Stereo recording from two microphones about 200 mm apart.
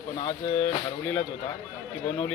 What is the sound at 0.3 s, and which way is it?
Speech, 10° left (ahead or behind).